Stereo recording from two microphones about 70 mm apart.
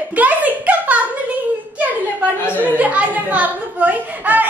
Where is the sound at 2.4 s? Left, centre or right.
Left.